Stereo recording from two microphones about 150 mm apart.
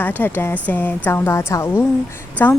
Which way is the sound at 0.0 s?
10° left (ahead or behind).